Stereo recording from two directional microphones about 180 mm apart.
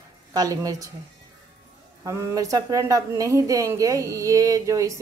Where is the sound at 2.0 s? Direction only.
15° right (ahead or behind).